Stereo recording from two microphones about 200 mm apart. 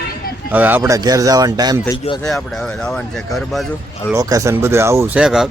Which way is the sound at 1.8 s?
25° left (ahead or behind).